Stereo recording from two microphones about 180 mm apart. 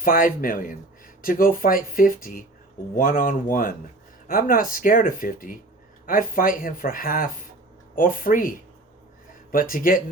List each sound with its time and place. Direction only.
0.0 s speech: 50° left (ahead or behind)